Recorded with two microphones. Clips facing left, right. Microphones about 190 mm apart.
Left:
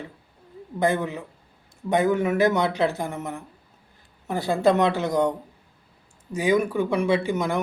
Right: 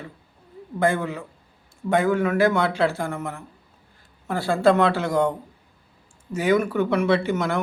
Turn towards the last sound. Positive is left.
turn(degrees=15)  # may be behind; listen again after turning